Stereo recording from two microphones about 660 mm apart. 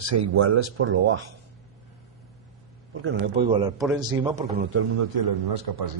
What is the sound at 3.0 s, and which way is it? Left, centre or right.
A man's voice, centre.